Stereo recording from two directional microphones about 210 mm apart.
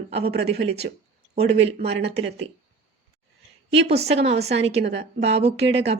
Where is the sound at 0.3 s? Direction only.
50° right (ahead or behind).